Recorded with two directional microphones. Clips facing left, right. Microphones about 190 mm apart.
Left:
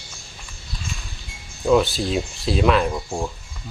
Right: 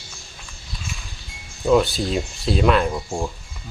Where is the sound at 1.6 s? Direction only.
Centre (ahead or behind).